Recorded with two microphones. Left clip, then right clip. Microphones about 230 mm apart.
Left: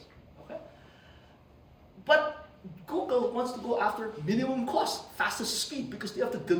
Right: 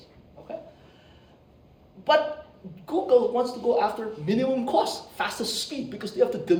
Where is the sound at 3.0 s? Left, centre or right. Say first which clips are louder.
Right 8 dB; centre.